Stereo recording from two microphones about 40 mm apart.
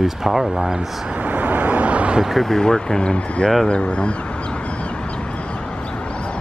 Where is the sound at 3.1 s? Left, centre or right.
Left.